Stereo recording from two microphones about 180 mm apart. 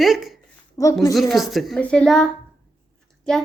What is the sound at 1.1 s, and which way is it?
A woman's voice, centre (ahead or behind).